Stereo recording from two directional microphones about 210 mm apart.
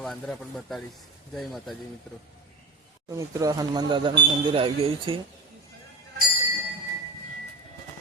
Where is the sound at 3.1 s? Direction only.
15° right (ahead or behind).